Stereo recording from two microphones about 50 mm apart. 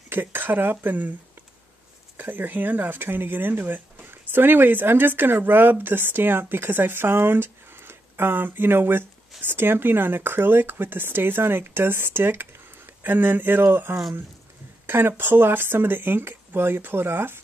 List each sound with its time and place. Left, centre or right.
0.1 s speech: right
2.1 s speech: right